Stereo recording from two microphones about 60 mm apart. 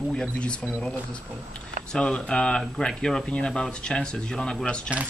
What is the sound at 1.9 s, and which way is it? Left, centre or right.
Speech, centre.